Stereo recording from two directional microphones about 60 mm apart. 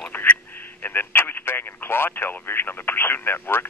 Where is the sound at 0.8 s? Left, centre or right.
Left.